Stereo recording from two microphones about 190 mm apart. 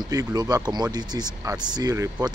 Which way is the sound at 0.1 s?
20° right (ahead or behind).